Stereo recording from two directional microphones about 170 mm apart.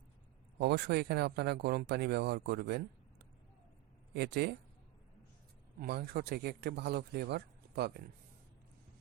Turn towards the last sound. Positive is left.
turn(degrees=-80)